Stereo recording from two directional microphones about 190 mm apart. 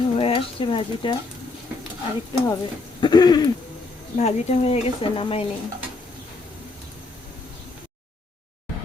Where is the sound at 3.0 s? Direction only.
20° left (ahead or behind).